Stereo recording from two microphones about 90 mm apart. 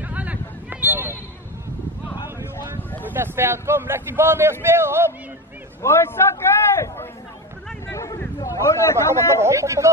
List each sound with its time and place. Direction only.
0.0 s a sound: 15° right (ahead or behind)
3.1 s speech: 25° right (ahead or behind)
5.8 s a man's voice: 30° left (ahead or behind)
7.9 s a sound: 35° left (ahead or behind)
9.0 s speech: 30° left (ahead or behind)
9.4 s speech: 35° right (ahead or behind)